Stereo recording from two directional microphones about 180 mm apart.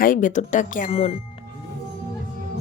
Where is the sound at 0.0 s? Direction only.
50° left (ahead or behind).